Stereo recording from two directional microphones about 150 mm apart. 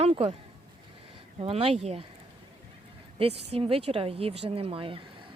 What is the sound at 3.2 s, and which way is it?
A woman's voice, 40° right (ahead or behind).